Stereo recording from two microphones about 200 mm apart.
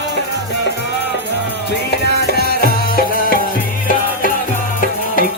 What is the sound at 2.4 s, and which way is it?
Music, 50° left (ahead or behind).